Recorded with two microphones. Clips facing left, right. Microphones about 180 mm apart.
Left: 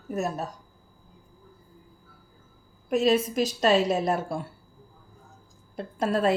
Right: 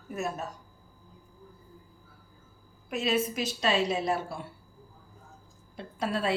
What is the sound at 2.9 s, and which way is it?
A woman's voice, 40° left (ahead or behind).